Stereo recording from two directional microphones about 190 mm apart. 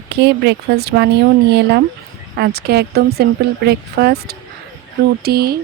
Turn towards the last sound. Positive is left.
turn(degrees=-55)  # may be behind; listen again after turning